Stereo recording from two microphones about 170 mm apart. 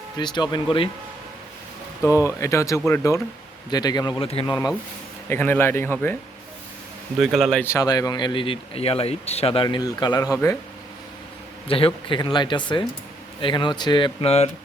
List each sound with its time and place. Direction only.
0.2 s speech: 25° left (ahead or behind)
2.2 s speech: 15° left (ahead or behind)
7.2 s a man's voice: centre (ahead or behind)
7.6 s speech: 20° left (ahead or behind); by 9.6 s 35° left (ahead or behind)
9.6 s speech: 25° left (ahead or behind)
11.7 s speech: 30° left (ahead or behind)